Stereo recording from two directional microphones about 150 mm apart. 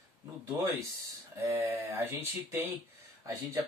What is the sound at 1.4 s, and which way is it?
Speech, 15° right (ahead or behind).